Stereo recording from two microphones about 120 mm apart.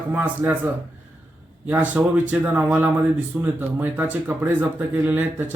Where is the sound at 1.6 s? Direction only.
15° right (ahead or behind).